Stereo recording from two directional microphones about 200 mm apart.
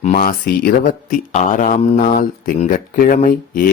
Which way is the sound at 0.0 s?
40° left (ahead or behind).